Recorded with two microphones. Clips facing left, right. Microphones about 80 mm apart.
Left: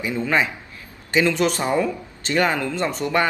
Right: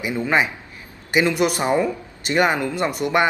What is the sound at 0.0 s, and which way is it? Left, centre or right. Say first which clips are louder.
A man's voice: right 1 dB; centre.